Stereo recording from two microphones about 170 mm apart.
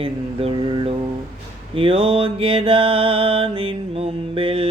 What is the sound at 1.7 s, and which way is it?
Mantra, 30° right (ahead or behind).